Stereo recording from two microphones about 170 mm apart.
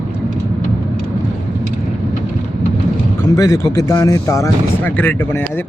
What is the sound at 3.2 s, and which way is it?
Speech, 20° left (ahead or behind).